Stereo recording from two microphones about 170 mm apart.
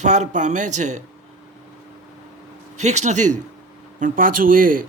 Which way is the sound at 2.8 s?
40° right (ahead or behind).